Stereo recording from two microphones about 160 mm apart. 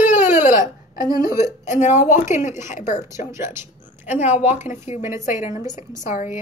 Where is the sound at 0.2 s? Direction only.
15° right (ahead or behind).